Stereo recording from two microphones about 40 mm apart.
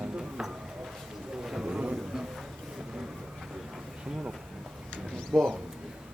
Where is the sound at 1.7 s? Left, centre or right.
Right.